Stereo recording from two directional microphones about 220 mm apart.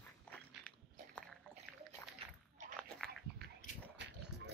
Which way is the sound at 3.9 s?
50° right (ahead or behind).